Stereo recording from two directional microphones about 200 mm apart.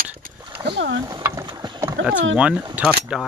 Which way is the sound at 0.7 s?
55° right (ahead or behind).